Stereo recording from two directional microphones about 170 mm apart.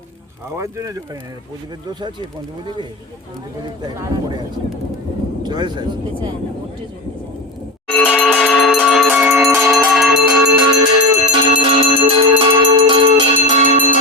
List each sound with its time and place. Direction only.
0.5 s speech: 20° right (ahead or behind)
3.8 s speech: 25° right (ahead or behind)
7.9 s music: centre (ahead or behind)
8.3 s bell: 5° left (ahead or behind)
9.7 s a sound: 5° right (ahead or behind)
10.1 s music: 20° right (ahead or behind); by 13.9 s 40° right (ahead or behind)